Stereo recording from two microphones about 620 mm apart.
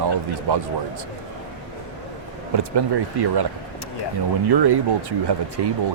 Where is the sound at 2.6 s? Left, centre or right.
Right.